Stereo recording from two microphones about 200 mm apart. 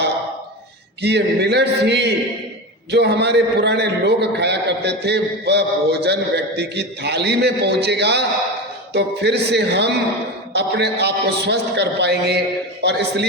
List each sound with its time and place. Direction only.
1.0 s a man's voice: 55° right (ahead or behind)